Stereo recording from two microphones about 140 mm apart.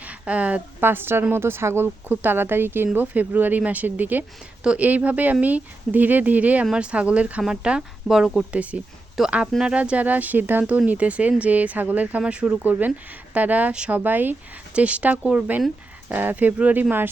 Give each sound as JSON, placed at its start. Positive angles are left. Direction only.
{"t": 0.0, "sound": "speech", "side_deg": -10}